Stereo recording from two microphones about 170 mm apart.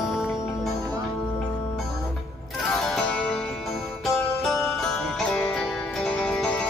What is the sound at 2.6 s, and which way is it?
Music, centre (ahead or behind).